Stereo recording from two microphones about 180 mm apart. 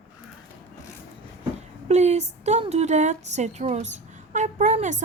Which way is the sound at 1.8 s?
40° right (ahead or behind).